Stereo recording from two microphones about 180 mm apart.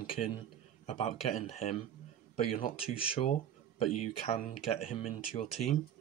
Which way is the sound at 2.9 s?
30° left (ahead or behind).